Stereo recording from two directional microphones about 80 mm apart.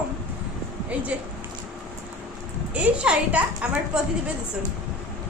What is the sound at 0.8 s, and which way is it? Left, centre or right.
Speech, centre.